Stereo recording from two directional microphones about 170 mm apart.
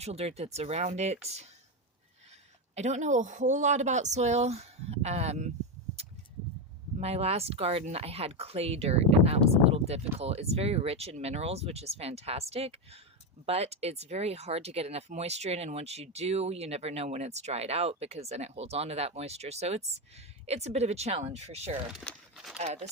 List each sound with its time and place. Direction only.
0.0 s speech: 40° right (ahead or behind)
2.7 s speech: 45° right (ahead or behind)
7.0 s speech: 40° right (ahead or behind)
21.9 s a sound: centre (ahead or behind)
22.5 s speech: 40° right (ahead or behind)